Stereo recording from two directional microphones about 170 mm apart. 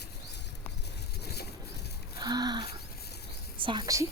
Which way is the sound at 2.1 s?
25° right (ahead or behind).